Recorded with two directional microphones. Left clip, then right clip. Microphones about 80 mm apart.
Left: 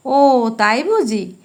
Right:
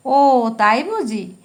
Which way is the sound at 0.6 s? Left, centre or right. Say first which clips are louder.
Left 1 dB; left.